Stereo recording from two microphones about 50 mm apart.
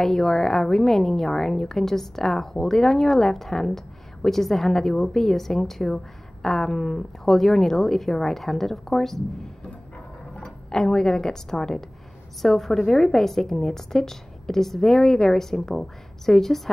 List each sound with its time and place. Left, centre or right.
0.0 s a woman's voice: centre